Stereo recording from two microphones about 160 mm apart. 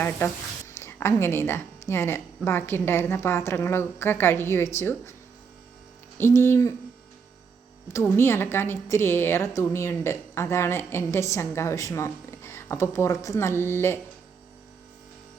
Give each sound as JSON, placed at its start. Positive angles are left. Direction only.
{"t": 0.2, "sound": "a woman's voice", "side_deg": 10}
{"t": 6.1, "sound": "a woman's voice", "side_deg": 15}
{"t": 7.9, "sound": "a woman's voice", "side_deg": 15}